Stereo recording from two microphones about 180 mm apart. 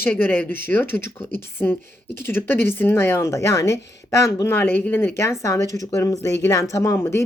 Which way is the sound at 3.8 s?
75° left (ahead or behind).